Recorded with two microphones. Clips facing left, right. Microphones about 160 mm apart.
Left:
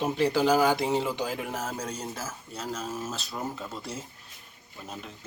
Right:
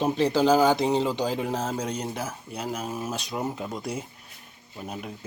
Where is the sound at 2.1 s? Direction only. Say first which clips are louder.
Right 5 dB; 65° right (ahead or behind).